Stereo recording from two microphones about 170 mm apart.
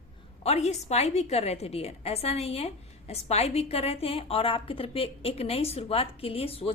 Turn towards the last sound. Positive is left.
turn(degrees=35)  # may be behind; listen again after turning